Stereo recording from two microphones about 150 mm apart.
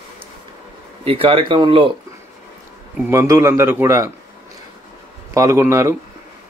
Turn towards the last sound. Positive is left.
turn(degrees=-20)  # may be behind; listen again after turning